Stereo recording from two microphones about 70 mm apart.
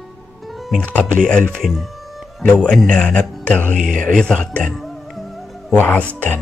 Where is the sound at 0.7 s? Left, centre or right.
Centre.